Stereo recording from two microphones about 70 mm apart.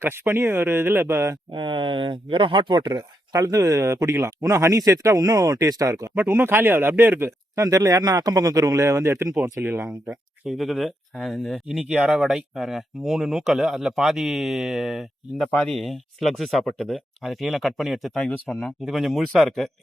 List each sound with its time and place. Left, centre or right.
0.0 s speech: right
2.6 s speech: right
6.2 s speech: right
7.5 s speech: right
9.3 s speech: right
10.1 s speech: centre
11.8 s speech: centre
12.2 s speech: centre